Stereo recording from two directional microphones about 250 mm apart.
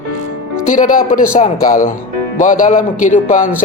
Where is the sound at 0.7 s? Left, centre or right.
Left.